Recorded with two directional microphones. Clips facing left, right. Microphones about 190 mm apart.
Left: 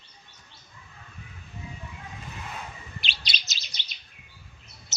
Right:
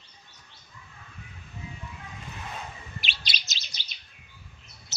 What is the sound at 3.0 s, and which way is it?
Chirp, 5° right (ahead or behind).